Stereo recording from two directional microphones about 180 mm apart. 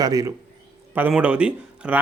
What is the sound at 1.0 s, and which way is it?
A man's voice, 10° right (ahead or behind).